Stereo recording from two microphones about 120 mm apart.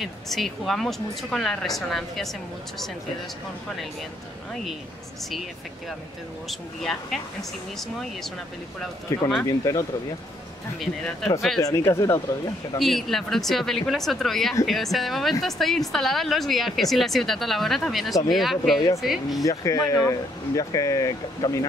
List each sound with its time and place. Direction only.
0.0 s a woman's voice: centre (ahead or behind)
6.8 s a woman's voice: centre (ahead or behind)
9.4 s speech: 25° left (ahead or behind)
10.8 s a woman's voice: 5° left (ahead or behind)
11.6 s speech: 25° left (ahead or behind)
12.7 s a woman's voice: centre (ahead or behind)
19.6 s speech: 25° left (ahead or behind)